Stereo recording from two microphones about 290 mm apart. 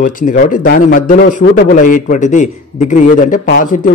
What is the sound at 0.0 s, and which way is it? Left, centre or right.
A man's voice, left.